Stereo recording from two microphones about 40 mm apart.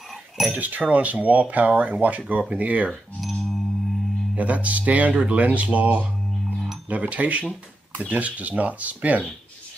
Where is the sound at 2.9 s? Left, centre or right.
Centre.